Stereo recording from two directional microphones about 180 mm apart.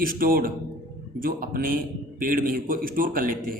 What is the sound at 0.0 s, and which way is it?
Speech, 50° right (ahead or behind).